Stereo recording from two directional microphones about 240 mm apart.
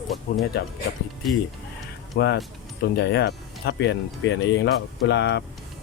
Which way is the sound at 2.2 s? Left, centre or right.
Left.